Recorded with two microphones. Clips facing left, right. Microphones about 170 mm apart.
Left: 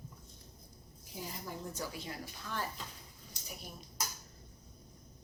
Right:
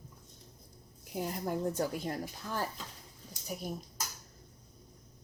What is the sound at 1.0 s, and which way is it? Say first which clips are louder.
Speech: right 9 dB; 60° right (ahead or behind).